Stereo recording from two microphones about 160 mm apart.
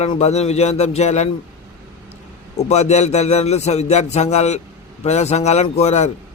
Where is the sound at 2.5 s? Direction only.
45° left (ahead or behind).